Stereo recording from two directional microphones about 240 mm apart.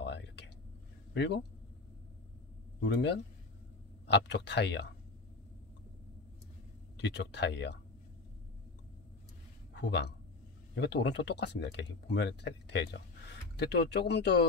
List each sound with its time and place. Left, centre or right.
0.0 s a sound: left
1.1 s speech: left
2.8 s speech: left
7.0 s speech: left
9.8 s speech: left